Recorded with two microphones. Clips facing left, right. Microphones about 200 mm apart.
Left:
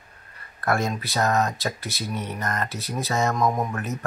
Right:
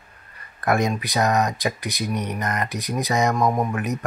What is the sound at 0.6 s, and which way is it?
Speech, 15° right (ahead or behind).